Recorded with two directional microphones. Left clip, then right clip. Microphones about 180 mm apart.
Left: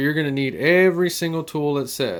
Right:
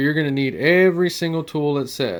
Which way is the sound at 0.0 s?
10° right (ahead or behind).